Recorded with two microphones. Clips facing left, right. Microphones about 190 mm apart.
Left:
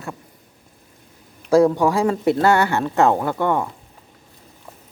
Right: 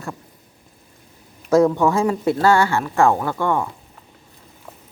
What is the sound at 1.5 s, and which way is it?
Speech, 35° left (ahead or behind).